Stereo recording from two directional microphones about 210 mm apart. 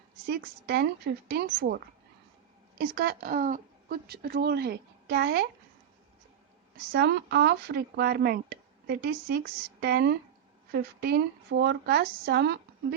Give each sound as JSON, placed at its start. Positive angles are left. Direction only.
{"t": 0.3, "sound": "a woman's voice", "side_deg": -50}
{"t": 6.9, "sound": "a woman's voice", "side_deg": -50}